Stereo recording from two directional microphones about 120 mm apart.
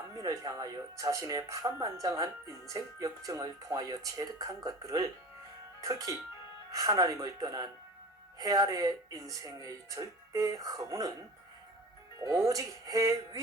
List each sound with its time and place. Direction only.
0.2 s speech: 30° right (ahead or behind)
6.7 s speech: 30° right (ahead or behind)
12.2 s speech: 25° right (ahead or behind)